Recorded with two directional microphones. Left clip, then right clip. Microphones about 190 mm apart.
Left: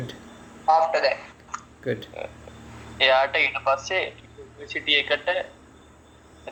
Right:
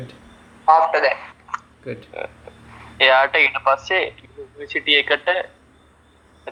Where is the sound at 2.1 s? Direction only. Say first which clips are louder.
Right 4 dB; 35° right (ahead or behind).